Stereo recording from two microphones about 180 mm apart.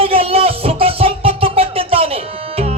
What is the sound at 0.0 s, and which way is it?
Music, 35° right (ahead or behind).